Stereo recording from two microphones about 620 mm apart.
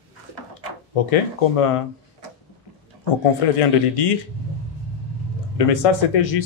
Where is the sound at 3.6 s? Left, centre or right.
Left.